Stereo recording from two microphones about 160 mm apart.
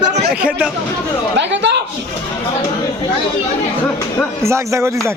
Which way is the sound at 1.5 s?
90° right.